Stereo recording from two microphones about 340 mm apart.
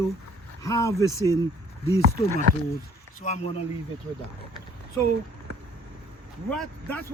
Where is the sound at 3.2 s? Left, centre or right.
Centre.